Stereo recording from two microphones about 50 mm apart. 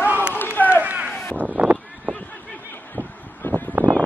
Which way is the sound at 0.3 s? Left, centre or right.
Left.